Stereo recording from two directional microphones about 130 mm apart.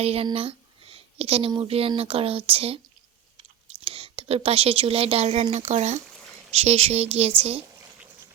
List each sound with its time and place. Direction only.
0.0 s speech: 50° right (ahead or behind)
3.8 s speech: 45° right (ahead or behind)